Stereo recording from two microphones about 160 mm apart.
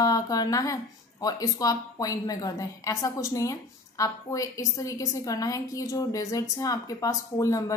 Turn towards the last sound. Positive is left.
turn(degrees=20)  # may be behind; listen again after turning